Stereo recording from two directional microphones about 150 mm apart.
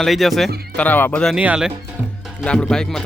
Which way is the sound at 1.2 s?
5° right (ahead or behind).